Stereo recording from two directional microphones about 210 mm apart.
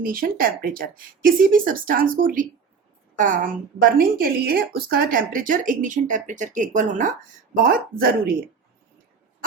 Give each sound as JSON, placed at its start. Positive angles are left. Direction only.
{"t": 0.0, "sound": "a woman's voice", "side_deg": -40}